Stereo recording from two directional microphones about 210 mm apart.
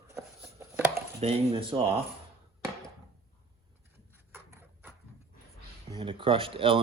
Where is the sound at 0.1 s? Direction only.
15° right (ahead or behind).